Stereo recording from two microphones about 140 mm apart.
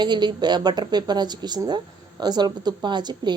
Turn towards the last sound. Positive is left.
turn(degrees=-30)  # may be behind; listen again after turning